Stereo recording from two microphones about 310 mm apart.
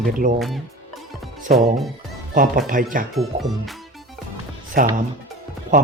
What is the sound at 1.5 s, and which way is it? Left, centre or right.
Speech, centre.